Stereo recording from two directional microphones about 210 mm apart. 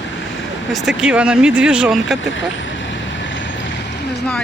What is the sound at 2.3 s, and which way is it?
Vehicle, 65° left (ahead or behind).